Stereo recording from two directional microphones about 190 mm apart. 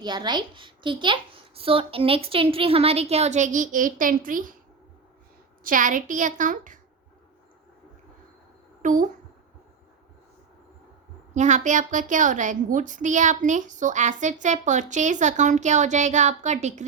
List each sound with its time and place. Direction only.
0.0 s a woman's voice: 20° right (ahead or behind); by 4.5 s 45° right (ahead or behind)
5.6 s a woman's voice: 45° right (ahead or behind)
8.8 s a woman's voice: 40° right (ahead or behind)
11.3 s a woman's voice: 40° right (ahead or behind)